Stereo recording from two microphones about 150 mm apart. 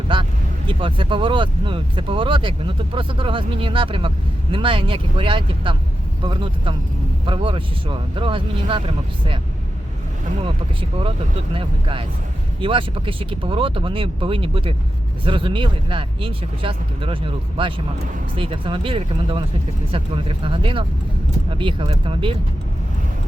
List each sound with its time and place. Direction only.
0.7 s speech: 35° right (ahead or behind)
11.5 s speech: 35° right (ahead or behind)